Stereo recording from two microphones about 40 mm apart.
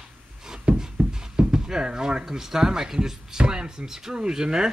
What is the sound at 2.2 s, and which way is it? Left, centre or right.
Speech, centre.